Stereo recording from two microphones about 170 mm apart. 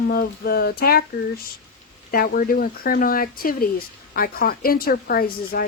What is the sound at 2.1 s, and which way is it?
Speech, 60° left (ahead or behind).